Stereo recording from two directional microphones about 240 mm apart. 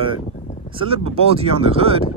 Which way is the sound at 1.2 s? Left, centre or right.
Right.